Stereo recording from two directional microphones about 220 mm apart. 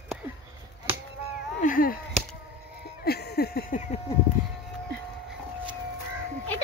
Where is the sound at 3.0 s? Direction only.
45° left (ahead or behind).